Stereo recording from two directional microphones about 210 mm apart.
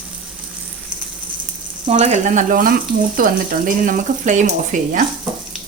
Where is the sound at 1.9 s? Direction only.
30° right (ahead or behind).